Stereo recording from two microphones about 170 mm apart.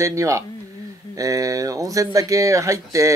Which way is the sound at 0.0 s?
15° right (ahead or behind).